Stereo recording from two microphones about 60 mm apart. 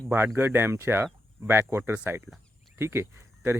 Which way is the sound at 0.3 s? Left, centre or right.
Right.